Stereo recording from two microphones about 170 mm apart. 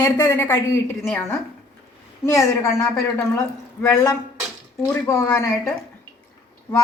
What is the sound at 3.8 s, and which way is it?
A woman's voice, 25° left (ahead or behind).